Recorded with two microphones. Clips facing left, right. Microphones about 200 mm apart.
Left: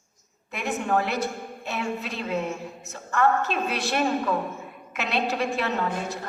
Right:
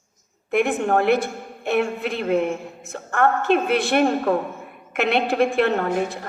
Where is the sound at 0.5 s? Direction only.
55° right (ahead or behind).